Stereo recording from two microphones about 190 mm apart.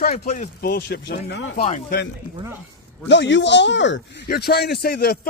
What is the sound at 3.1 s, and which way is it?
Speech, 70° left (ahead or behind).